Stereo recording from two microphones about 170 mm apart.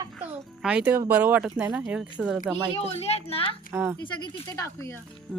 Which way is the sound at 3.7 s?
15° right (ahead or behind).